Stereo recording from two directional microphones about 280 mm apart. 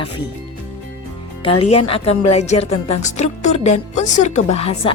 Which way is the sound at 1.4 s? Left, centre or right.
Centre.